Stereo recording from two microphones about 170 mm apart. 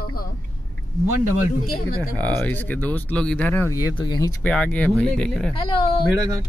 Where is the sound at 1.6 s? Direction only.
65° left (ahead or behind).